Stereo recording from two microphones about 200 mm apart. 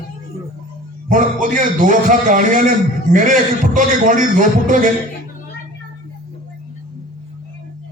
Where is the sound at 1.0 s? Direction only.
40° right (ahead or behind).